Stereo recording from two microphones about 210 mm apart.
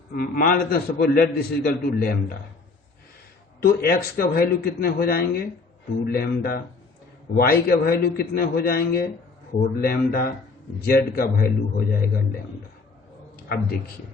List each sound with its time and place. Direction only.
0.1 s a man's voice: 45° left (ahead or behind)
3.6 s a man's voice: 45° left (ahead or behind)